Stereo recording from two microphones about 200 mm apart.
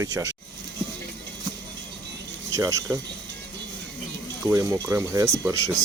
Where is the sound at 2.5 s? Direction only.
15° right (ahead or behind).